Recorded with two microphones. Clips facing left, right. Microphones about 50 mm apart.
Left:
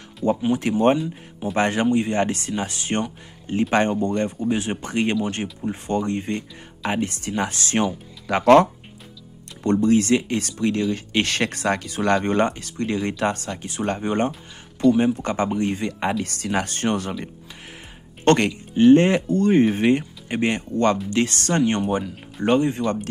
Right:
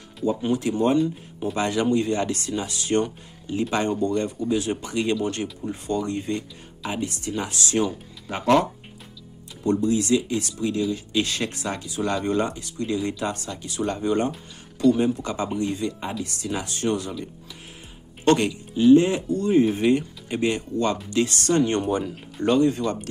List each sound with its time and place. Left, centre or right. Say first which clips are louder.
0.5 s speech: left 3 dB; left
0.9 s speech: right 4 dB; centre
1.5 s speech: left 3 dB; left
1.9 s speech: left 2 dB; left
8.3 s speech: left 6 dB; left
9.8 s speech: left 5 dB; left
15.2 s speech: left 3 dB; left
15.9 s speech: left 6 dB; left
18.2 s speech: left 2 dB; left
19.8 s speech: left 1 dB; left